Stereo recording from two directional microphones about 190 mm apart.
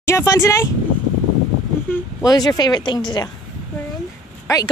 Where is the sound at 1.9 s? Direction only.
20° left (ahead or behind).